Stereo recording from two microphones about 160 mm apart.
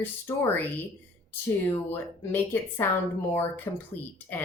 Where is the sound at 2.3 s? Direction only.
15° left (ahead or behind).